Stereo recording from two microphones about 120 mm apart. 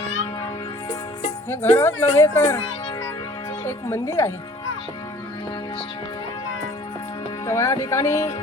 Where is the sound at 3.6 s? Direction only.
25° left (ahead or behind).